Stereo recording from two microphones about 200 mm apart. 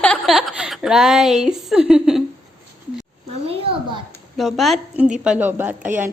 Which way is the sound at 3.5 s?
25° right (ahead or behind).